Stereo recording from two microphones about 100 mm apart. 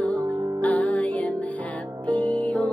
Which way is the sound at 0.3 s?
45° right (ahead or behind).